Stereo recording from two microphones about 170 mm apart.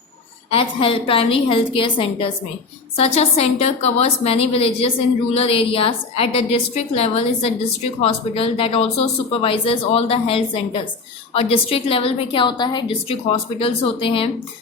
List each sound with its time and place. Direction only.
0.5 s speech: 35° left (ahead or behind)